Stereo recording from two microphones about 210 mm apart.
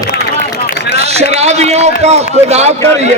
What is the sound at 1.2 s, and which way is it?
Speech, 30° right (ahead or behind).